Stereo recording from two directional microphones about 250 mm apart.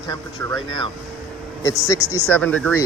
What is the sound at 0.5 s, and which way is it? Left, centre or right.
Speech, right.